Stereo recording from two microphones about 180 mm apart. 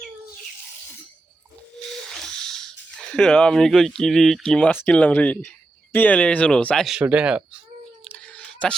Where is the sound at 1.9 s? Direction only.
5° left (ahead or behind).